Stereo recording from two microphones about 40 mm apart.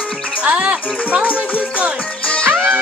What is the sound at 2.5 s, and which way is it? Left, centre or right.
Music, right.